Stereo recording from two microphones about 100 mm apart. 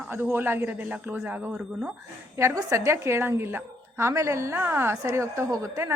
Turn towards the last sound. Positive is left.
turn(degrees=-30)  # may be behind; listen again after turning